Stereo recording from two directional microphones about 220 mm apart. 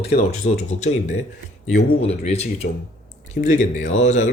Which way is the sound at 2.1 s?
30° left (ahead or behind).